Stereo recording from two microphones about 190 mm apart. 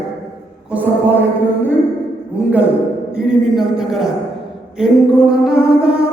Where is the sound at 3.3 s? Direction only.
Centre (ahead or behind).